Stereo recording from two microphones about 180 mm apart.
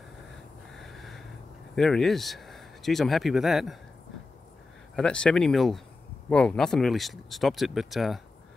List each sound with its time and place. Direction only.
0.7 s a sound: centre (ahead or behind)
1.8 s speech: 5° left (ahead or behind)
4.9 s speech: 5° left (ahead or behind)